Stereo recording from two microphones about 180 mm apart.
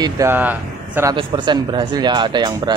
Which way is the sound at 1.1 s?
25° right (ahead or behind).